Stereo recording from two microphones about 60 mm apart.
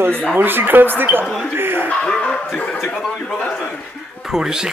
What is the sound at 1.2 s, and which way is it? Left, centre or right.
Speech, centre.